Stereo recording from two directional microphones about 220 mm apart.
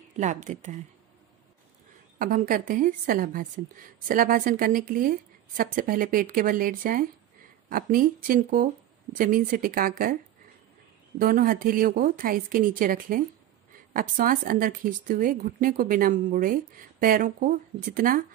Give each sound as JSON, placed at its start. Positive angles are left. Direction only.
{"t": 0.2, "sound": "a woman's voice", "side_deg": -35}
{"t": 2.1, "sound": "a woman's voice", "side_deg": -40}
{"t": 11.1, "sound": "a woman's voice", "side_deg": -40}